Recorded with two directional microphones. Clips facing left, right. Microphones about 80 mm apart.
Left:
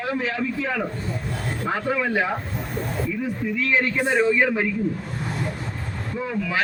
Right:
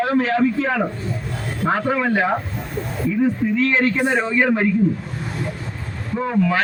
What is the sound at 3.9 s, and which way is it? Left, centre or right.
Speech, right.